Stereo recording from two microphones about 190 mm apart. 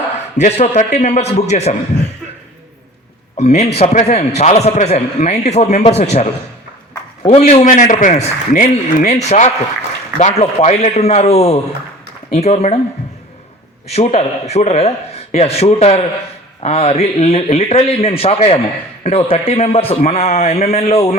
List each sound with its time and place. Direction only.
0.3 s a man's voice: 35° left (ahead or behind)
3.8 s a man's voice: 35° left (ahead or behind)
13.8 s a man's voice: 35° left (ahead or behind)